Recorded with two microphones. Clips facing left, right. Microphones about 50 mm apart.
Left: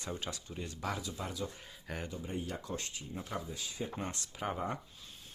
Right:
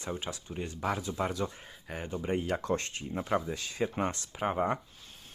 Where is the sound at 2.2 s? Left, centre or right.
Right.